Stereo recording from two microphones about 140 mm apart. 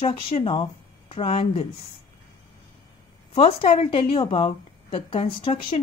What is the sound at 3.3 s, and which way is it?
A woman's voice, 40° left (ahead or behind).